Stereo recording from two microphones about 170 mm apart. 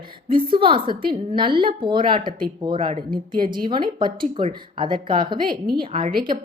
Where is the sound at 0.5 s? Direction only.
30° right (ahead or behind).